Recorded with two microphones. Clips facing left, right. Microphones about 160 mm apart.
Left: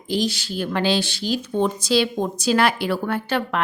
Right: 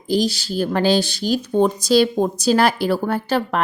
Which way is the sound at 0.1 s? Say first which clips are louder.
Right 4 dB; 40° right (ahead or behind).